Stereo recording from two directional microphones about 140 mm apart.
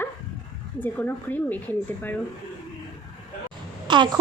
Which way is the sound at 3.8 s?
35° right (ahead or behind).